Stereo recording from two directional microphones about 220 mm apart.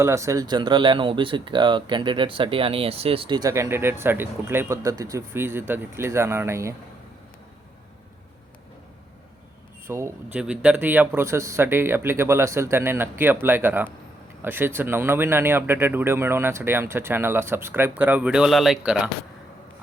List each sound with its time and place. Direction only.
0.0 s speech: 15° right (ahead or behind)
9.8 s speech: 10° right (ahead or behind)